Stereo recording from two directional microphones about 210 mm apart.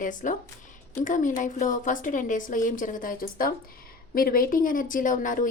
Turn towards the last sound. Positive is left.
turn(degrees=40)  # may be behind; listen again after turning